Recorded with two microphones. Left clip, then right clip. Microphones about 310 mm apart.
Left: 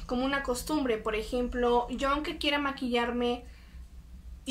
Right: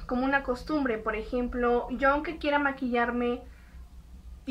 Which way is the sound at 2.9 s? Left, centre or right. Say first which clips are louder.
Left 1 dB; centre.